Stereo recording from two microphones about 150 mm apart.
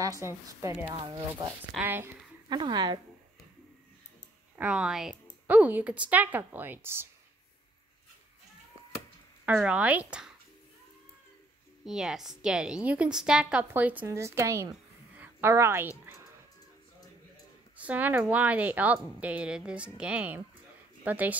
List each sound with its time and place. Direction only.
0.0 s a woman's voice: 20° right (ahead or behind)
0.8 s speech: 30° right (ahead or behind)
1.8 s speech: 15° right (ahead or behind)
2.5 s speech: 30° right (ahead or behind)
4.6 s speech: 5° right (ahead or behind)
9.5 s speech: 10° right (ahead or behind)
11.8 s a woman's voice: 5° right (ahead or behind); by 14.7 s 20° right (ahead or behind)
14.7 s a sound: 15° right (ahead or behind)
17.7 s speech: 10° right (ahead or behind)